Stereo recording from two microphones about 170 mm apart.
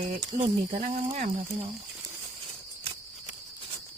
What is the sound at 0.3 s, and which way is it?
Speech, 45° right (ahead or behind).